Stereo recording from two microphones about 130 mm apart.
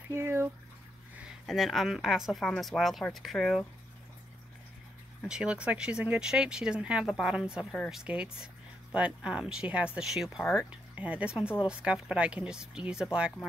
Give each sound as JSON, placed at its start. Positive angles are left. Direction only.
{"t": 0.1, "sound": "speech", "side_deg": -20}
{"t": 1.4, "sound": "speech", "side_deg": 0}
{"t": 5.3, "sound": "speech", "side_deg": -10}